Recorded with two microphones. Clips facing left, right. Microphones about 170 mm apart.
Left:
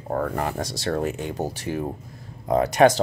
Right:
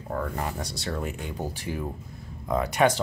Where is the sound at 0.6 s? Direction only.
90° left.